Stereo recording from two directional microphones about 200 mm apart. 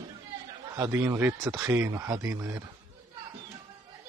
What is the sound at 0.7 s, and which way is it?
A man's voice, 15° right (ahead or behind).